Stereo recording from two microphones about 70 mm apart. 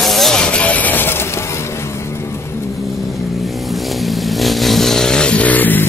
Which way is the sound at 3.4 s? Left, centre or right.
Centre.